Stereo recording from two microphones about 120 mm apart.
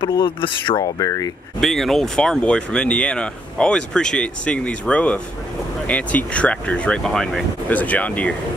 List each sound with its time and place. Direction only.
0.2 s speech: 45° left (ahead or behind); by 1.3 s 30° left (ahead or behind)
1.6 s speech: centre (ahead or behind)